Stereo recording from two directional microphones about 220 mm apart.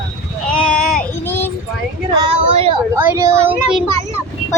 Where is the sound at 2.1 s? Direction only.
20° right (ahead or behind).